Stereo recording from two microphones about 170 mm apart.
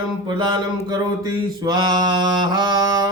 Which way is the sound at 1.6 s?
25° right (ahead or behind).